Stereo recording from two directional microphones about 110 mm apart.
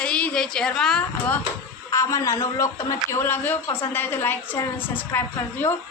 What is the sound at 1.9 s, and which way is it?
A man's voice, 30° left (ahead or behind).